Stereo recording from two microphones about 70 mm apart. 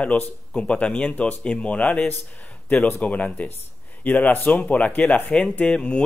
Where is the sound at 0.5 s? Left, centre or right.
Centre.